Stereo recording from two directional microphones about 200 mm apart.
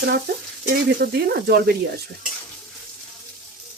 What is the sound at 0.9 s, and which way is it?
Speech, 55° right (ahead or behind).